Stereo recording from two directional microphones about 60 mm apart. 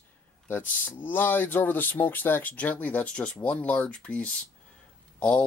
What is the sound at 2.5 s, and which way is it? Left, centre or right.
Speech, left.